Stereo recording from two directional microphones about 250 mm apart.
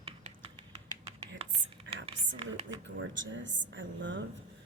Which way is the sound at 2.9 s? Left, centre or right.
Right.